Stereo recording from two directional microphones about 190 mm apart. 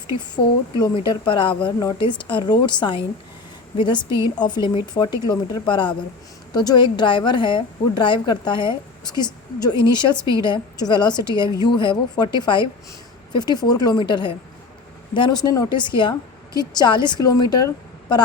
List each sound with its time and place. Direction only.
0.8 s speech: 20° left (ahead or behind)